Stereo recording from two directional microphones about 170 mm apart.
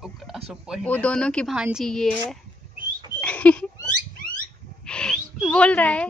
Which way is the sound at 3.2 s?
10° left (ahead or behind).